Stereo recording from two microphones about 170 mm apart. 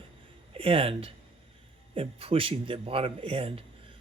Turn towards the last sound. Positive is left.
turn(degrees=-35)  # may be behind; listen again after turning